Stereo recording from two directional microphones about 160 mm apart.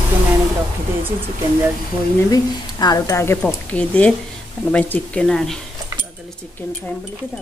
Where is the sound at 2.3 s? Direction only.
25° left (ahead or behind).